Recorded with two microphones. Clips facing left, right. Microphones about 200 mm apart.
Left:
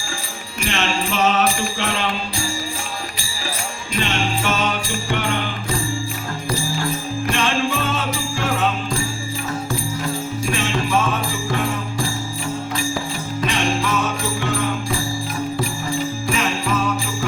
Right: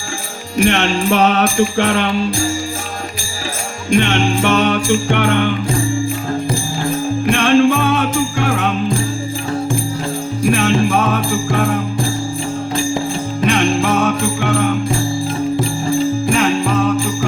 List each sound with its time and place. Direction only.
0.6 s jingle bell: 60° right (ahead or behind)
3.9 s jingle bell: 60° right (ahead or behind)
7.3 s jingle bell: 55° right (ahead or behind)
10.5 s jingle bell: 55° right (ahead or behind)
13.5 s jingle bell: 55° right (ahead or behind)
16.3 s music: 55° right (ahead or behind)